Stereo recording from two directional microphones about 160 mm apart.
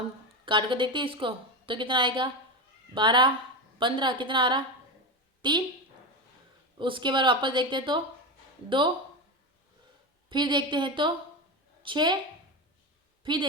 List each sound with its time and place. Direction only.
0.4 s a woman's voice: 30° right (ahead or behind)
6.7 s speech: 30° right (ahead or behind)
10.2 s a woman's voice: 30° right (ahead or behind)